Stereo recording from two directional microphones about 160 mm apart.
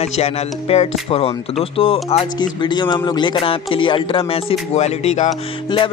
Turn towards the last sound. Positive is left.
turn(degrees=35)  # may be behind; listen again after turning